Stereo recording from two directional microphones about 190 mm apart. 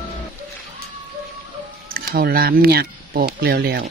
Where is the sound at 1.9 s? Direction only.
50° right (ahead or behind).